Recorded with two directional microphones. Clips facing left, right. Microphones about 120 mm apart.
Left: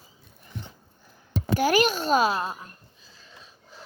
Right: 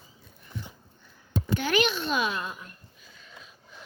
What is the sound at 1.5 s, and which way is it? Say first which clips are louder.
A child's voice: left 4 dB; 40° left (ahead or behind).